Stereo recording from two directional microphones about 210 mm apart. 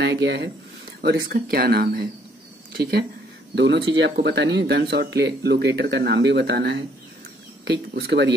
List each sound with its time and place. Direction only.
0.0 s speech: 55° right (ahead or behind)